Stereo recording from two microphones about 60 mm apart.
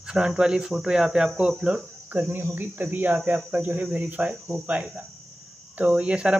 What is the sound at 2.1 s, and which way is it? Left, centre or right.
Speech, right.